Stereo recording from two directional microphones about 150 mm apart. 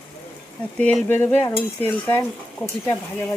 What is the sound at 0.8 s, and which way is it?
Stir, 10° left (ahead or behind).